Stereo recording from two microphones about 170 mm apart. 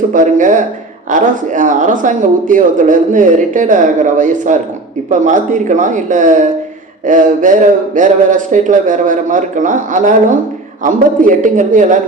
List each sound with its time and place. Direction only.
0.1 s speech: 50° right (ahead or behind)